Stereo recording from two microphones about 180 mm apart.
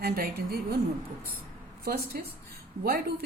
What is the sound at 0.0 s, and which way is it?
Speech, 60° right (ahead or behind).